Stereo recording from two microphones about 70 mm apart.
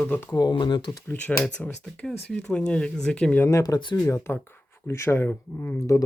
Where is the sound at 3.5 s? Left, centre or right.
Left.